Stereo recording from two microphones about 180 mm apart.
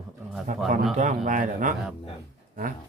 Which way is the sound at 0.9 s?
45° right (ahead or behind).